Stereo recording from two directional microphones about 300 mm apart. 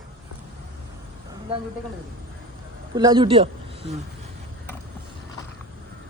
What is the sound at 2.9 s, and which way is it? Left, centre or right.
Speech, centre.